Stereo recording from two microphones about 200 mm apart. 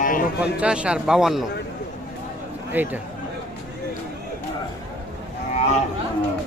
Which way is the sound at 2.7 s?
10° right (ahead or behind).